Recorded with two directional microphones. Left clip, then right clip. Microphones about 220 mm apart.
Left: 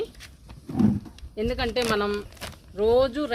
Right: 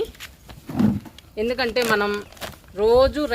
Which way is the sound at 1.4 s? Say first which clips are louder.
Right 4 dB; 20° right (ahead or behind).